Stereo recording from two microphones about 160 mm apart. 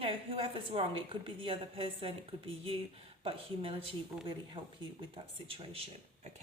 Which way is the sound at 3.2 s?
35° right (ahead or behind).